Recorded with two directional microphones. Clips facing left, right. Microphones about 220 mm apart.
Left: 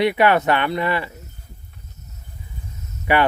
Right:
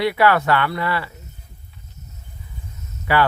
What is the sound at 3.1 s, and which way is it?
Speech, 20° left (ahead or behind).